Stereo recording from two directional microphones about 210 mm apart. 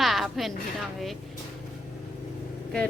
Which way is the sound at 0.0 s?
Centre (ahead or behind).